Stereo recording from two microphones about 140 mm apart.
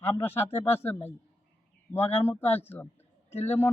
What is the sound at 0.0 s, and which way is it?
Speech, 15° left (ahead or behind).